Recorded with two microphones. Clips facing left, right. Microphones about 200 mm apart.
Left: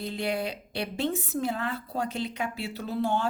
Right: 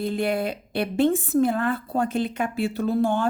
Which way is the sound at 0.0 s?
50° right (ahead or behind).